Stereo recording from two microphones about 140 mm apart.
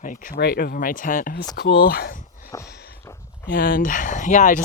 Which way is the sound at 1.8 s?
90° left.